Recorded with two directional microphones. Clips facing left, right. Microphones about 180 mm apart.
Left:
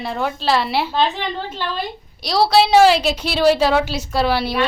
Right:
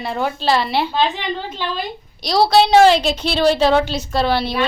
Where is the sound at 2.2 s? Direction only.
5° left (ahead or behind).